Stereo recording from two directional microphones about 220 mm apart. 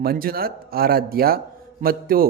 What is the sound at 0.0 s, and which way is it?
Speech, 45° right (ahead or behind).